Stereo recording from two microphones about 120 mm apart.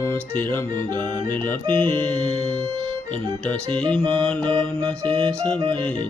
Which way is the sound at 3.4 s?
10° left (ahead or behind).